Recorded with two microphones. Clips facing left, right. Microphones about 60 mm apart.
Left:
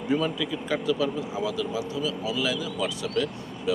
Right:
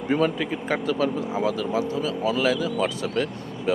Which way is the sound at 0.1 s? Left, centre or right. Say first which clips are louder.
Right 3 dB; right.